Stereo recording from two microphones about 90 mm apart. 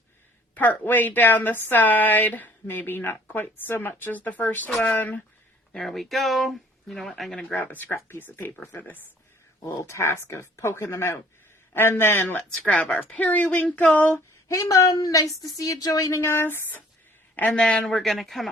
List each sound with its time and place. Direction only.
0.5 s a woman's voice: 20° left (ahead or behind)
5.7 s speech: centre (ahead or behind)
7.4 s speech: 20° left (ahead or behind)
9.6 s a woman's voice: 40° left (ahead or behind); by 14.2 s 15° left (ahead or behind)
14.4 s speech: 35° left (ahead or behind); by 18.4 s centre (ahead or behind)